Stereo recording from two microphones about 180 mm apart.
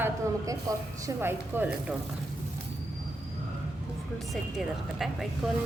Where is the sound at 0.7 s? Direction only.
20° right (ahead or behind).